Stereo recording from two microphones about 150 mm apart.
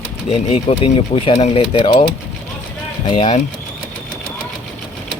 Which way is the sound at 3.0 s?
35° left (ahead or behind).